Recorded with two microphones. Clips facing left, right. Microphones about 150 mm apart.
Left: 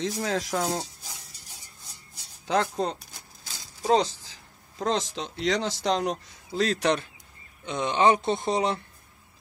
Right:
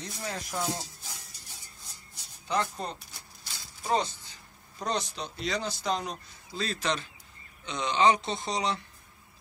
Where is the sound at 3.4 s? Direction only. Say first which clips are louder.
Left 9 dB; 90° left.